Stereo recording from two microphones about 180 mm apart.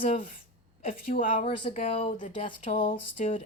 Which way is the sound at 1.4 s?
30° left (ahead or behind).